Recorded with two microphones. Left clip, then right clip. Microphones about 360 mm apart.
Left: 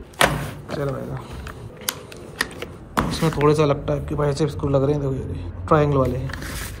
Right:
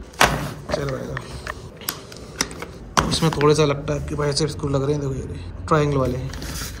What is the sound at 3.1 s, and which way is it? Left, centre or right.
Speech, centre.